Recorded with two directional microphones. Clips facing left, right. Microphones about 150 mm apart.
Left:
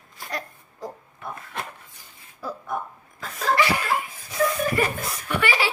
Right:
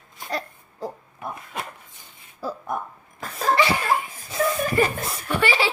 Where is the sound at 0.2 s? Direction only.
30° right (ahead or behind).